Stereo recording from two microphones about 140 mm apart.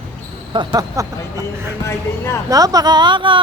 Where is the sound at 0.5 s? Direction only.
30° right (ahead or behind).